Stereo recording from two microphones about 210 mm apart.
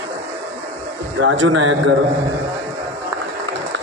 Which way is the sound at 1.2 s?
65° right (ahead or behind).